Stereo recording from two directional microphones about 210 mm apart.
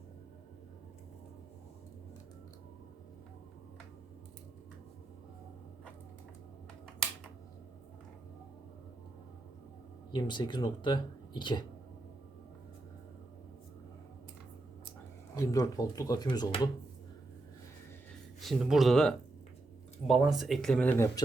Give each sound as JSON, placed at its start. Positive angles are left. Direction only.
{"t": 10.1, "sound": "speech", "side_deg": 20}
{"t": 15.4, "sound": "speech", "side_deg": 15}
{"t": 18.3, "sound": "speech", "side_deg": 0}